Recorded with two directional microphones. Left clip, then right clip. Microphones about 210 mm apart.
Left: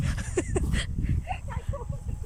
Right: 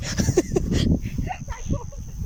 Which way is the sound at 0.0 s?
20° right (ahead or behind).